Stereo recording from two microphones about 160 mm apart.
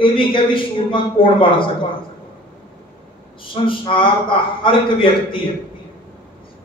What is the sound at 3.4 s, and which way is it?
A man's voice, 30° left (ahead or behind).